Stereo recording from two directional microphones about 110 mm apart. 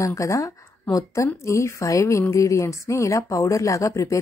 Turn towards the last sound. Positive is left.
turn(degrees=30)  # may be behind; listen again after turning